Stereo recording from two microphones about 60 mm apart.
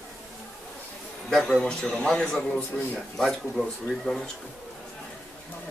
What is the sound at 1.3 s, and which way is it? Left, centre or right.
A man's voice, centre.